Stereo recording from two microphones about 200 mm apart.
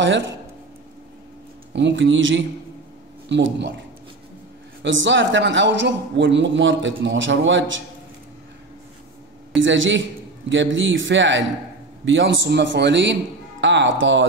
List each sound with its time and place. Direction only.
0.0 s speech: 65° right (ahead or behind)
1.7 s speech: 60° right (ahead or behind)
4.8 s speech: 65° right (ahead or behind)
9.5 s speech: 70° right (ahead or behind)